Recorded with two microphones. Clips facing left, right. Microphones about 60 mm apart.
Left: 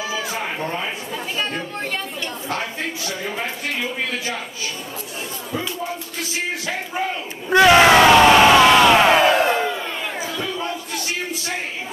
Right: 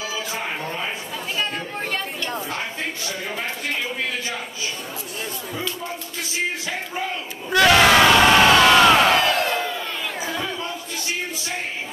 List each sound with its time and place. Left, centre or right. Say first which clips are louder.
1.4 s chatter: even; centre
7.0 s crowd: left 3 dB; centre